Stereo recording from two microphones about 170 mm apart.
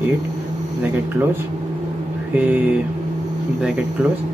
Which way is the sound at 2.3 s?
10° right (ahead or behind).